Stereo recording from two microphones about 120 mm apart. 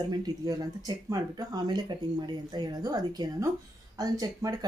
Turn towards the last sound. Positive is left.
turn(degrees=-30)  # may be behind; listen again after turning